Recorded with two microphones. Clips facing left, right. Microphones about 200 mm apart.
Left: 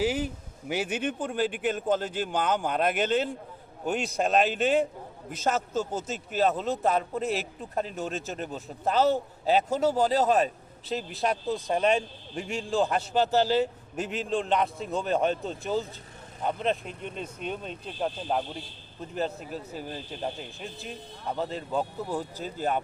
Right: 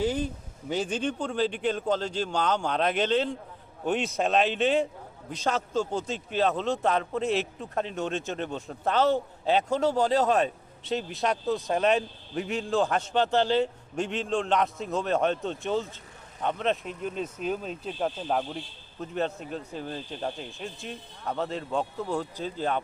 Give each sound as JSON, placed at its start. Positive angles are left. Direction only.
{"t": 0.0, "sound": "a man's voice", "side_deg": 10}